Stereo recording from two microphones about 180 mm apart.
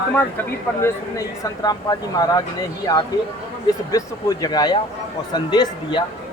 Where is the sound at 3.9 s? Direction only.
20° left (ahead or behind).